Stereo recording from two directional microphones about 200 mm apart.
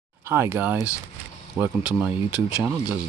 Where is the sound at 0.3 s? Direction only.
10° right (ahead or behind).